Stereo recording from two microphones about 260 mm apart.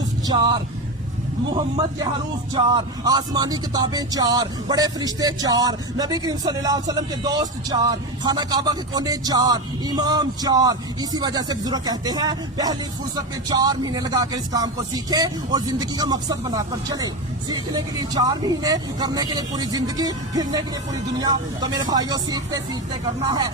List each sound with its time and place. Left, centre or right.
0.3 s speech: centre
2.6 s speech: centre